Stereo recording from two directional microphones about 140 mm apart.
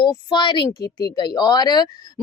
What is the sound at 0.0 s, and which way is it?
A woman's voice, 35° left (ahead or behind).